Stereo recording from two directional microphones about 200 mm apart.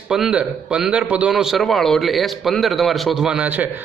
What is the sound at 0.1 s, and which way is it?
A man's voice, 5° right (ahead or behind).